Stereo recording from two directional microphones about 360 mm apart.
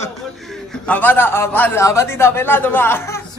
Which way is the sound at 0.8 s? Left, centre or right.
Centre.